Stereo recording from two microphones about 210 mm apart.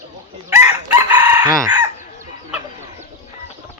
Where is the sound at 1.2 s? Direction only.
15° right (ahead or behind).